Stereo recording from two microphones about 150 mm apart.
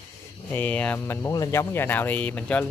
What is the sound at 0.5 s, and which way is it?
Speech, 10° left (ahead or behind).